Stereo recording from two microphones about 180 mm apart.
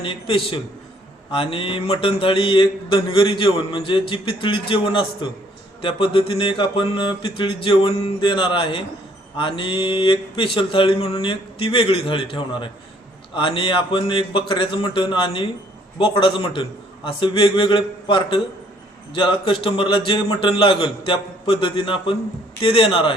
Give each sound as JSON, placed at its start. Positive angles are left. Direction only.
{"t": 0.0, "sound": "mantra", "side_deg": 30}
{"t": 22.6, "sound": "a man's voice", "side_deg": 30}